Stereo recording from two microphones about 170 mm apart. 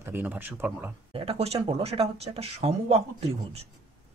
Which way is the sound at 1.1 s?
35° right (ahead or behind).